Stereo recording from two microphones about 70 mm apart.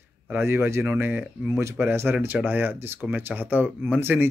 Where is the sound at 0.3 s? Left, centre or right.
Right.